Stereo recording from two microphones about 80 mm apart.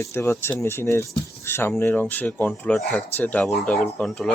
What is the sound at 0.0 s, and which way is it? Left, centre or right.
Speech, left.